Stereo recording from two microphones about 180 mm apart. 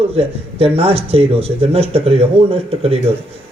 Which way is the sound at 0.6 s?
35° right (ahead or behind).